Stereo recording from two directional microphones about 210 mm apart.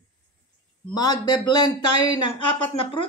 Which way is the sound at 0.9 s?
20° left (ahead or behind).